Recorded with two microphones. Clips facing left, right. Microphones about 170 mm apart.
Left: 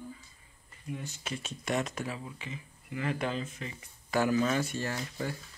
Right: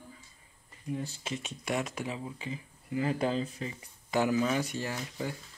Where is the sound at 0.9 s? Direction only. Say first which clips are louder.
Right 3 dB; 30° right (ahead or behind).